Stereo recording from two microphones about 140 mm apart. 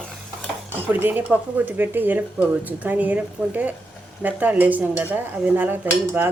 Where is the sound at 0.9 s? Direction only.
15° right (ahead or behind).